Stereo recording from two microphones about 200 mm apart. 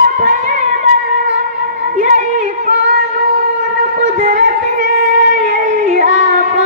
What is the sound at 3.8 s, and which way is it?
Music, 40° right (ahead or behind).